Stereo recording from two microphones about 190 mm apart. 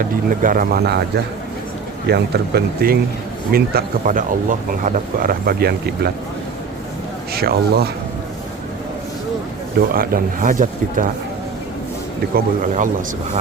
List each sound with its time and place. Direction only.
0.0 s speech: 45° right (ahead or behind)
2.0 s speech: 60° right (ahead or behind)
7.3 s speech: 55° right (ahead or behind)
9.9 s speech: 50° right (ahead or behind)
12.3 s speech: 45° right (ahead or behind)